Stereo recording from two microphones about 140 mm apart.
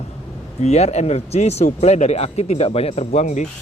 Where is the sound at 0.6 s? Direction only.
50° left (ahead or behind).